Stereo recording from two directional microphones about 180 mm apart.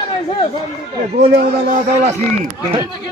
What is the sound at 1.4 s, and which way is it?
Speech, 50° right (ahead or behind).